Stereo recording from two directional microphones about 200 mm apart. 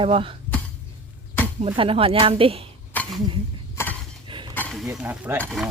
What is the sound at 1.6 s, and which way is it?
Speech, 30° right (ahead or behind).